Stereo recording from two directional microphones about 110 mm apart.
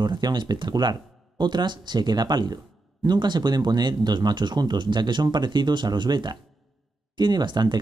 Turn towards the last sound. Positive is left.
turn(degrees=-40)  # may be behind; listen again after turning